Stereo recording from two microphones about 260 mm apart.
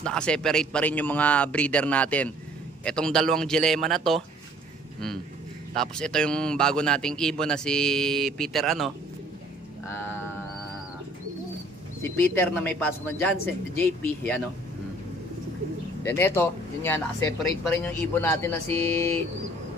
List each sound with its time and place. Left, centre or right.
0.0 s a man's voice: centre
5.8 s a man's voice: centre
12.0 s speech: centre
16.0 s speech: centre